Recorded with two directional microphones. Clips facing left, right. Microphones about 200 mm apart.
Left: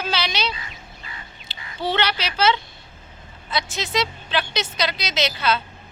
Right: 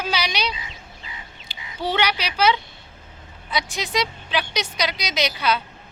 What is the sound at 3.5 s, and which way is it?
A woman's voice, 15° right (ahead or behind).